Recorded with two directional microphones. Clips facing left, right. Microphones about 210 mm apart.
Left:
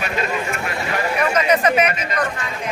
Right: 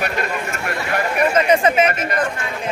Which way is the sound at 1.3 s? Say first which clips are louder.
Right 1 dB; 30° right (ahead or behind).